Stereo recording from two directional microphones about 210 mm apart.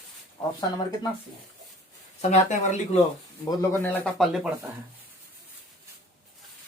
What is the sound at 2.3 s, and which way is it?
Speech, 35° left (ahead or behind).